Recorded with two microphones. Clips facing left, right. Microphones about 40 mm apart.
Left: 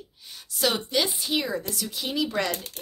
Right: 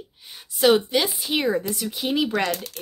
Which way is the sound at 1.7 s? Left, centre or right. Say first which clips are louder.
Right 5 dB; right.